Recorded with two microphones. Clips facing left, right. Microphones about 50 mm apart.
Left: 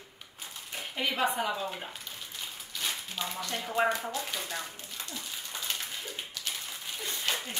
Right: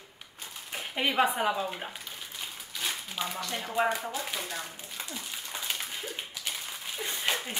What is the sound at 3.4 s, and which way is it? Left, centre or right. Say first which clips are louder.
Speech: even; centre.